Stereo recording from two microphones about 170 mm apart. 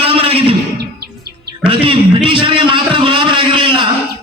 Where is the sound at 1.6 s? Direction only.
30° right (ahead or behind).